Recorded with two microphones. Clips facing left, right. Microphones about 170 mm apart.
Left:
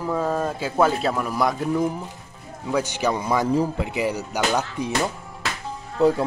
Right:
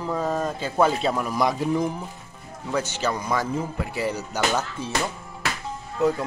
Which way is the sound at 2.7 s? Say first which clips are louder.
Left 3 dB; 15° left (ahead or behind).